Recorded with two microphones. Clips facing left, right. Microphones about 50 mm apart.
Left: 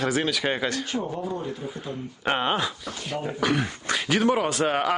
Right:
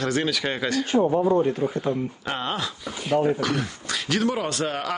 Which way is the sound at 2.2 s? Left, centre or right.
Left.